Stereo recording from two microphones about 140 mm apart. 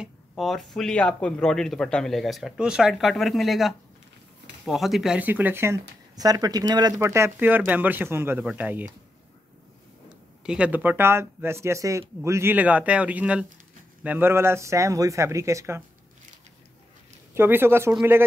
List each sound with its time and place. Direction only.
0.0 s speech: centre (ahead or behind); by 5.8 s 15° right (ahead or behind)
6.1 s speech: 25° right (ahead or behind); by 8.8 s 10° right (ahead or behind)
10.0 s speech: 5° right (ahead or behind)
17.3 s speech: 15° right (ahead or behind)